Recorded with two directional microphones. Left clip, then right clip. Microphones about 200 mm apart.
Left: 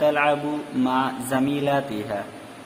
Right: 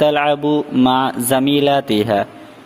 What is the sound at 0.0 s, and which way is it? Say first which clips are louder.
A man's voice: right 6 dB; 45° right (ahead or behind).